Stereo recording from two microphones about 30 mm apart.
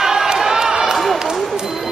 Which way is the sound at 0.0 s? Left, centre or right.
Centre.